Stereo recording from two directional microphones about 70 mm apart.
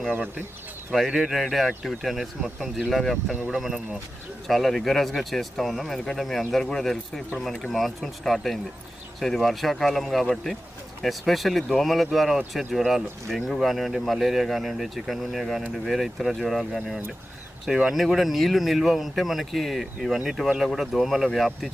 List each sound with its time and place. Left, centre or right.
0.1 s speech: right
0.9 s speech: centre